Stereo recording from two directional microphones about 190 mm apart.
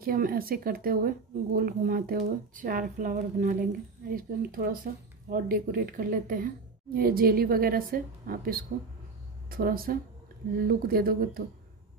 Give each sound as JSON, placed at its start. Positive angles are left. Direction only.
{"t": 0.0, "sound": "speech", "side_deg": -50}